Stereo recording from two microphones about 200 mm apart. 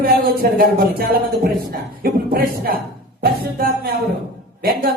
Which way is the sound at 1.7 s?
50° right (ahead or behind).